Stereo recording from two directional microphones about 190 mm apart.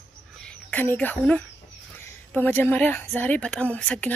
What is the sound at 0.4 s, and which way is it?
A woman's voice, 5° left (ahead or behind).